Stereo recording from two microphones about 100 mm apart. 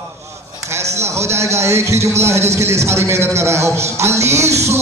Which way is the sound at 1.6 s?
30° right (ahead or behind).